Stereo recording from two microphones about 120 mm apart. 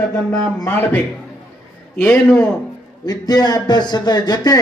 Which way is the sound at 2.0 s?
10° left (ahead or behind).